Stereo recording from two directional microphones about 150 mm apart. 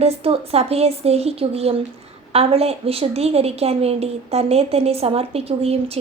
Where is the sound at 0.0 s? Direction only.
40° right (ahead or behind).